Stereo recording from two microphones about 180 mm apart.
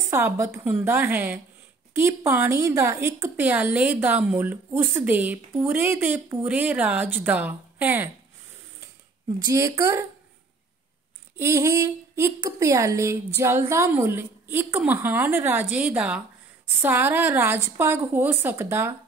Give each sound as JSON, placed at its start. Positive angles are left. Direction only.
{"t": 0.1, "sound": "a woman's voice", "side_deg": -15}
{"t": 9.5, "sound": "a woman's voice", "side_deg": -15}
{"t": 11.3, "sound": "a woman's voice", "side_deg": -15}